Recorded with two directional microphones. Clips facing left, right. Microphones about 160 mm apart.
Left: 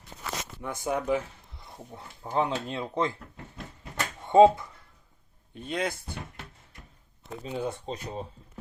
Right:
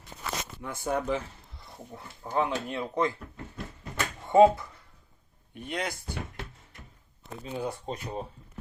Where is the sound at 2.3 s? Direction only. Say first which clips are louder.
Left 1 dB; 20° left (ahead or behind).